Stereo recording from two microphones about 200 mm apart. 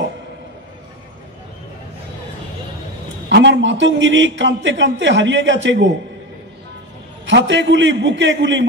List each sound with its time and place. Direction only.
3.3 s a man's voice: 60° right (ahead or behind)
7.2 s a man's voice: 65° right (ahead or behind)